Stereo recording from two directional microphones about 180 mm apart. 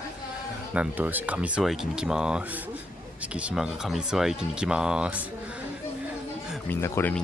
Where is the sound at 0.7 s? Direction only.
10° right (ahead or behind).